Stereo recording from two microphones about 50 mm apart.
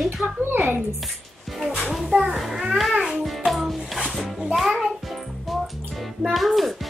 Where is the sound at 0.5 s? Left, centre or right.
Right.